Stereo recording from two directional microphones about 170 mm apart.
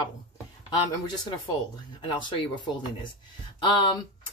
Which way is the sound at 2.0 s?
30° left (ahead or behind).